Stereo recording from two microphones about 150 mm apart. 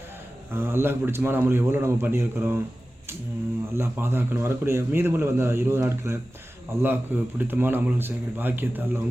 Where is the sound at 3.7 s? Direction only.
15° right (ahead or behind).